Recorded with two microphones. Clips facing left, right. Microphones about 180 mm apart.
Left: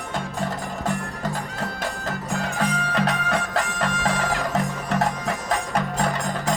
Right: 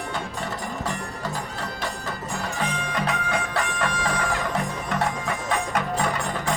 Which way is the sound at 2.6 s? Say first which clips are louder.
Left 4 dB; 40° left (ahead or behind).